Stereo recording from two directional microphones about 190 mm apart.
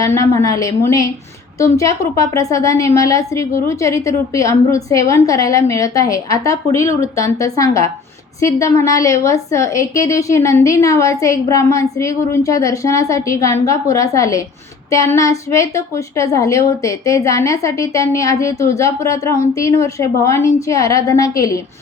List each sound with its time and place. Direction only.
0.0 s a woman's voice: 15° left (ahead or behind)